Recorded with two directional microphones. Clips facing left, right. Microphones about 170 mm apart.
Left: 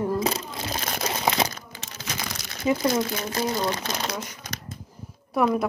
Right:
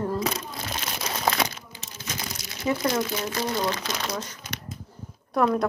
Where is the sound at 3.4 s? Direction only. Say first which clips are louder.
Left 2 dB; 25° left (ahead or behind).